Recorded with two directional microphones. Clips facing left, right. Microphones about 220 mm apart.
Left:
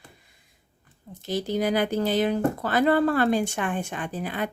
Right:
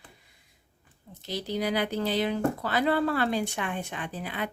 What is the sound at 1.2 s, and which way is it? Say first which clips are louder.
Speech: left 5 dB; 50° left (ahead or behind).